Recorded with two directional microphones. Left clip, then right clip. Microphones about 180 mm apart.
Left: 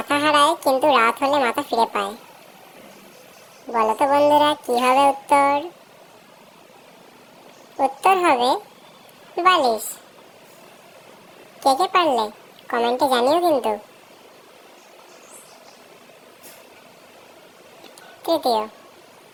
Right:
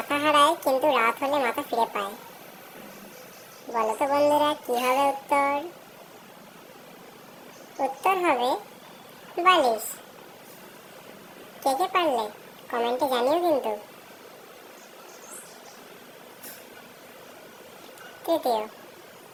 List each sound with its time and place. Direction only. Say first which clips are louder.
0.1 s a woman's voice: left 4 dB; 35° left (ahead or behind)
3.7 s a woman's voice: left 7 dB; 35° left (ahead or behind)
7.8 s a woman's voice: left 7 dB; 35° left (ahead or behind)
9.4 s a woman's voice: left 3 dB; 30° left (ahead or behind)
11.6 s a woman's voice: left 6 dB; 35° left (ahead or behind)
18.3 s a woman's voice: left 5 dB; 30° left (ahead or behind)